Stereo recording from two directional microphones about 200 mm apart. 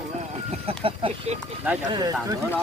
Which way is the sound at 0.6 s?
30° right (ahead or behind).